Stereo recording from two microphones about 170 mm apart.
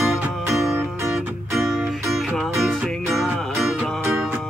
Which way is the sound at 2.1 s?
Centre (ahead or behind).